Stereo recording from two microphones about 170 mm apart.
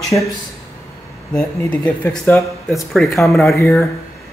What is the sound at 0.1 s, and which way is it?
Speech, 20° left (ahead or behind).